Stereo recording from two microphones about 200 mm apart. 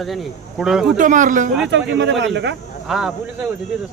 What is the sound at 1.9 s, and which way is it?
Speech, 65° right (ahead or behind).